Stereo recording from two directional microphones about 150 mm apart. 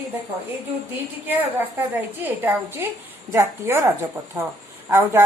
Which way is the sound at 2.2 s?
15° right (ahead or behind).